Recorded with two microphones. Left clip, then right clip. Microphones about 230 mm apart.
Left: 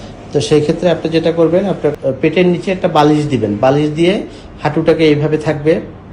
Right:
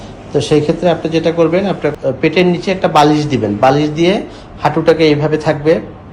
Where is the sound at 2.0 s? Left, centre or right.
Right.